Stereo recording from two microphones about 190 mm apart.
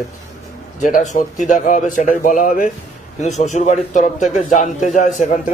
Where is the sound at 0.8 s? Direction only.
40° left (ahead or behind).